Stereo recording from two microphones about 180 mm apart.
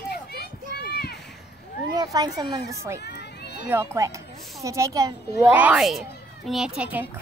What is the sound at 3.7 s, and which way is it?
A child's voice, 15° right (ahead or behind).